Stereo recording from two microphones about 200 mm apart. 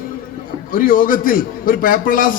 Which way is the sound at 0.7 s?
45° left (ahead or behind).